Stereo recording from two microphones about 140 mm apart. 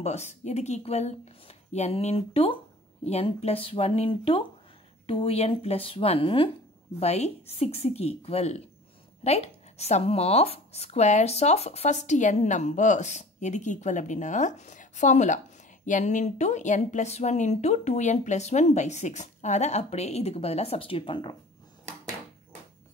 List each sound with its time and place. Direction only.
0.0 s speech: 55° left (ahead or behind); by 21.4 s 35° left (ahead or behind)